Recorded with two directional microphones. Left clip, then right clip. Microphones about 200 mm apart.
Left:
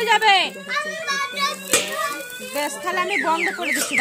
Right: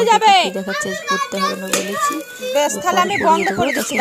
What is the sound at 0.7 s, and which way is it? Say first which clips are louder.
Speech: right 4 dB; 15° right (ahead or behind).